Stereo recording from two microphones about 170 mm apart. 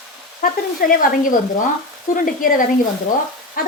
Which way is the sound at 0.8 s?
55° left (ahead or behind).